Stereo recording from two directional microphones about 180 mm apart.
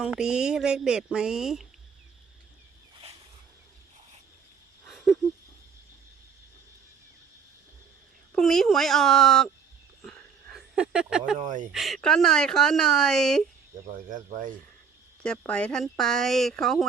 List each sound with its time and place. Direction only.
0.0 s speech: 5° right (ahead or behind)
8.3 s speech: centre (ahead or behind)
10.0 s dog: 5° left (ahead or behind)
10.8 s speech: 5° right (ahead or behind)
11.3 s speech: 45° right (ahead or behind)
11.7 s speech: centre (ahead or behind)
14.1 s speech: 45° right (ahead or behind)
15.2 s speech: 5° left (ahead or behind)